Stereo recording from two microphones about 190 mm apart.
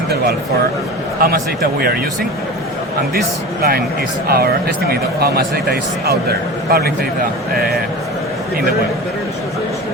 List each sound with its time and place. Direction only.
1.2 s a man's voice: 50° right (ahead or behind)
3.6 s a man's voice: 55° right (ahead or behind)